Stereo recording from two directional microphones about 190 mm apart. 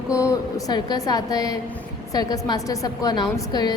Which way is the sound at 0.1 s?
15° left (ahead or behind).